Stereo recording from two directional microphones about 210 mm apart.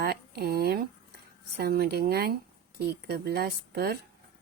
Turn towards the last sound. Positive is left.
turn(degrees=-45)  # may be behind; listen again after turning